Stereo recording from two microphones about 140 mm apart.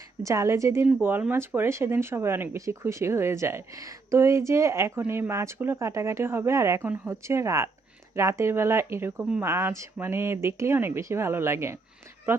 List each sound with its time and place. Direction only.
0.3 s speech: 20° right (ahead or behind)